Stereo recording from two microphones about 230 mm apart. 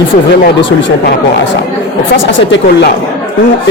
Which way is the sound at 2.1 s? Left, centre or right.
Left.